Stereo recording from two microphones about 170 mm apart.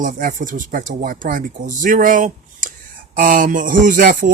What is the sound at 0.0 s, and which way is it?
Speech, 50° right (ahead or behind).